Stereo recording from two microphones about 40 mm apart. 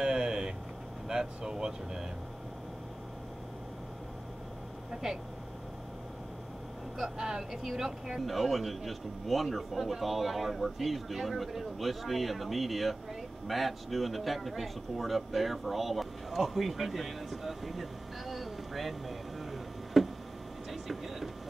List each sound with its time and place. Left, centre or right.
0.0 s vehicle: centre
1.0 s speech: centre
7.0 s speech: centre
20.7 s vehicle: centre